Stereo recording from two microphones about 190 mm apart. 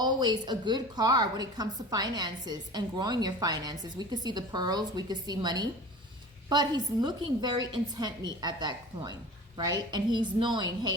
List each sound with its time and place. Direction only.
0.0 s a woman's voice: 20° right (ahead or behind)